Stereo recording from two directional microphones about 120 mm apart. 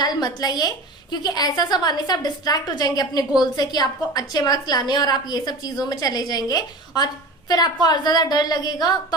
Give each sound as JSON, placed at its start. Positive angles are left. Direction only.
{"t": 0.0, "sound": "a woman's voice", "side_deg": 35}